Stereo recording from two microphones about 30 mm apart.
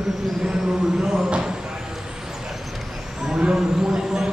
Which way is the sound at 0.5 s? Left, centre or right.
Centre.